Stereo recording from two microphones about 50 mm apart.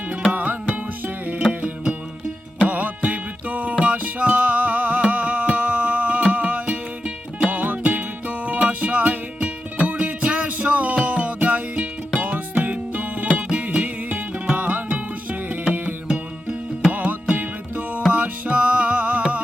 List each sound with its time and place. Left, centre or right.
0.3 s music: right
1.6 s music: right
16.0 s music: right